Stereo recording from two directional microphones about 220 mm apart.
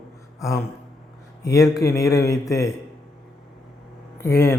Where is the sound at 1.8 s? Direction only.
15° left (ahead or behind).